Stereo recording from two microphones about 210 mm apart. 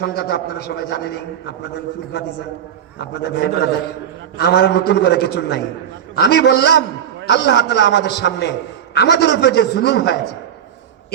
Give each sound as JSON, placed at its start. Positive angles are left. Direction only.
{"t": 0.0, "sound": "a man's voice", "side_deg": 50}
{"t": 3.0, "sound": "a man's voice", "side_deg": 50}